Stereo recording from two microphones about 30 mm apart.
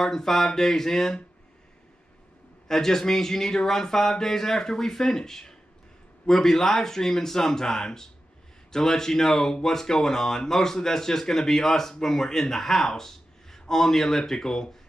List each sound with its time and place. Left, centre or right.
0.0 s speech: centre
2.7 s speech: centre